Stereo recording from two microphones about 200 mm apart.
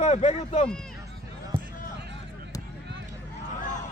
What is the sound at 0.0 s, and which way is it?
Speech, 30° left (ahead or behind).